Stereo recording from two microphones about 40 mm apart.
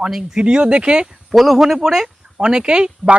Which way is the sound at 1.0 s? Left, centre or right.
Centre.